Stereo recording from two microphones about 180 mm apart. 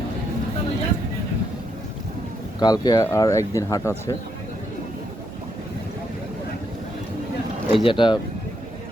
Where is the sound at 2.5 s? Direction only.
20° left (ahead or behind).